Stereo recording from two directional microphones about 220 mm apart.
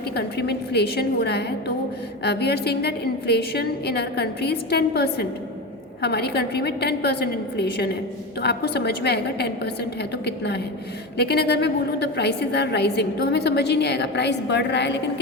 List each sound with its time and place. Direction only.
0.1 s a woman's voice: 50° left (ahead or behind)